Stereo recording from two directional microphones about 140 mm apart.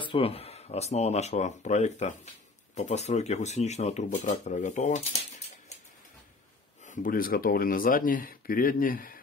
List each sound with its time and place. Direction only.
0.0 s speech: 40° left (ahead or behind); by 5.0 s 60° left (ahead or behind)
6.9 s speech: 80° left